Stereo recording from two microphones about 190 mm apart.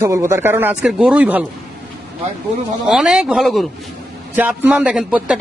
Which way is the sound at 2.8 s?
5° right (ahead or behind).